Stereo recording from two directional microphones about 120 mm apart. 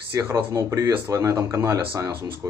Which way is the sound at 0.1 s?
25° right (ahead or behind).